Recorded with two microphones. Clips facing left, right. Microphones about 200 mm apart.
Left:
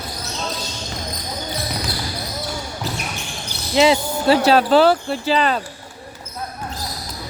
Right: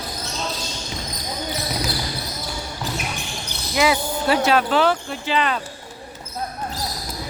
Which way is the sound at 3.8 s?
30° left (ahead or behind).